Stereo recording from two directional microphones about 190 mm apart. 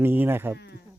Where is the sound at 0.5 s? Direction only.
60° left (ahead or behind).